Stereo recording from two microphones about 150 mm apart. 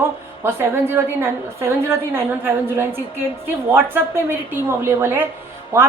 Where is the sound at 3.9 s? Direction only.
15° right (ahead or behind).